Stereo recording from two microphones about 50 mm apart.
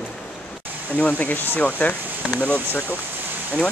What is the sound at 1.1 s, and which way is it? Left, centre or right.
Speech, left.